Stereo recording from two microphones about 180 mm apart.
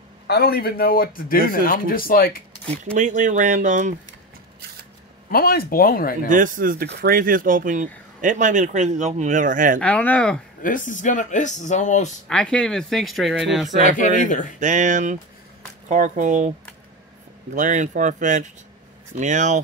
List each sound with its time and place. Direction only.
0.3 s a man's voice: 60° left (ahead or behind)
2.8 s speech: 40° right (ahead or behind)
5.3 s a man's voice: 55° left (ahead or behind)
6.2 s speech: 45° right (ahead or behind)
6.9 s speech: 60° right (ahead or behind)
9.8 s speech: 5° left (ahead or behind)
10.6 s speech: 45° left (ahead or behind)
12.3 s speech: 5° left (ahead or behind)
13.8 s speech: 45° left (ahead or behind)
14.6 s speech: 45° right (ahead or behind)
17.6 s speech: 45° right (ahead or behind)